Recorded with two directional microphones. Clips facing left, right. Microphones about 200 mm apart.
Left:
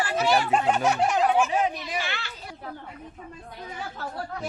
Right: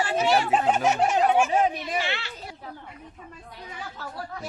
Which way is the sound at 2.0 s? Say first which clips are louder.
Right 3 dB; 25° right (ahead or behind).